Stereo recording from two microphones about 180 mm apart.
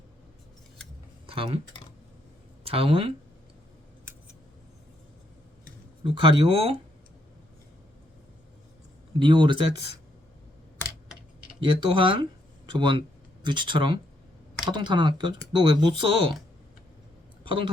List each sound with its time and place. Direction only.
1.3 s speech: 30° right (ahead or behind)
2.6 s speech: 30° right (ahead or behind)
6.0 s speech: 30° right (ahead or behind)
9.1 s speech: 25° right (ahead or behind)
11.6 s speech: 30° right (ahead or behind)
17.4 s a sound: 25° right (ahead or behind)